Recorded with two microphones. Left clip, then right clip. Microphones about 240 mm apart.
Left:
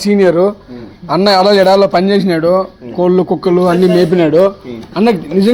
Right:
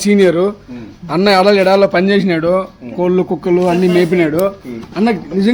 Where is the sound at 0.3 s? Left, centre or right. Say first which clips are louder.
Left 3 dB; centre.